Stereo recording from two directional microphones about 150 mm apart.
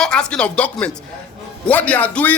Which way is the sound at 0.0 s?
5° left (ahead or behind).